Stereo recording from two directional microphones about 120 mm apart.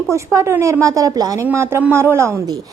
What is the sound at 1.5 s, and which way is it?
Speech, 20° right (ahead or behind).